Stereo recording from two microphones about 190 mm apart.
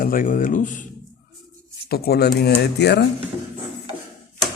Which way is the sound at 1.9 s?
55° left (ahead or behind).